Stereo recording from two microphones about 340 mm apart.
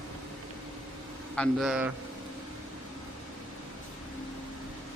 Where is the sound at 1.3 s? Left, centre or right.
Centre.